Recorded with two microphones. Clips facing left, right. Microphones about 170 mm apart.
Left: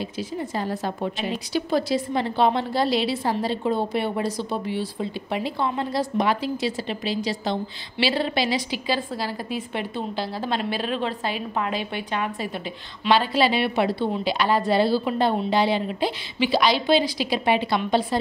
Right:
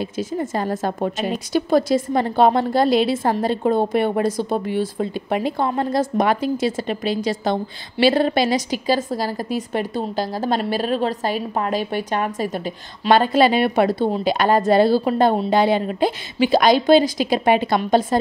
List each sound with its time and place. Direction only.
0.0 s a woman's voice: 45° right (ahead or behind)